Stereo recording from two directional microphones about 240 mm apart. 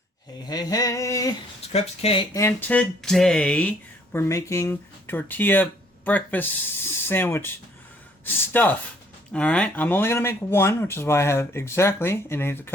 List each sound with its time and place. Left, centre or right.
0.4 s speech: centre
1.6 s speech: left
2.3 s speech: centre